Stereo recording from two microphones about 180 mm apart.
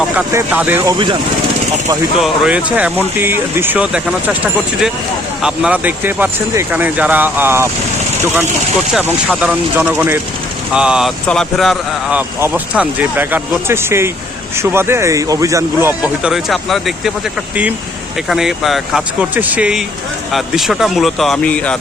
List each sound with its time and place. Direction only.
0.2 s speech: 10° right (ahead or behind)
0.9 s speech: 25° right (ahead or behind)
2.1 s speech: 5° right (ahead or behind)
5.4 s speech: 5° right (ahead or behind)
8.9 s speech: 5° right (ahead or behind)
18.3 s speech: centre (ahead or behind)